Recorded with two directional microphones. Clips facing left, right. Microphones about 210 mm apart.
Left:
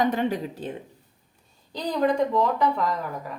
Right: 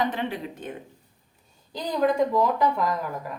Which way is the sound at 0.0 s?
45° left (ahead or behind).